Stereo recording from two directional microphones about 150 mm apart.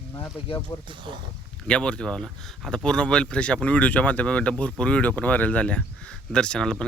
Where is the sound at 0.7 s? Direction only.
35° left (ahead or behind).